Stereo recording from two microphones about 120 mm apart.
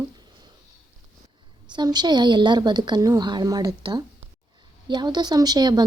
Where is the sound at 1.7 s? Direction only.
35° right (ahead or behind).